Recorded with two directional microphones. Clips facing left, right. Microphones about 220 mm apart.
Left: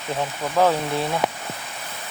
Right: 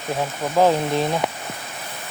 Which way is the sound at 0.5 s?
15° right (ahead or behind).